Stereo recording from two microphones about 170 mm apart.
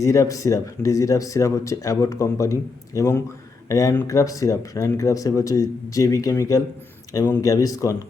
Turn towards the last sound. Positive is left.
turn(degrees=20)  # may be behind; listen again after turning